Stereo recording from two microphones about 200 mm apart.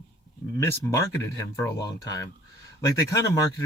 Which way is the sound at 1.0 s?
15° left (ahead or behind).